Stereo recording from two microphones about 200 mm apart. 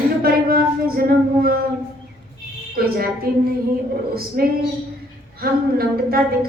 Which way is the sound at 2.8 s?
50° right (ahead or behind).